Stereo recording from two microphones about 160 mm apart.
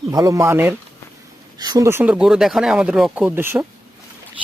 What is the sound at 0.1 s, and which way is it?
Speech, 20° right (ahead or behind).